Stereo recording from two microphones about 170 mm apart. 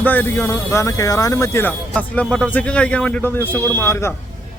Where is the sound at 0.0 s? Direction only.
10° left (ahead or behind).